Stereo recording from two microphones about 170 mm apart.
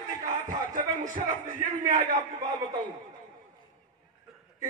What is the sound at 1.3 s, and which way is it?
Speech, 50° right (ahead or behind).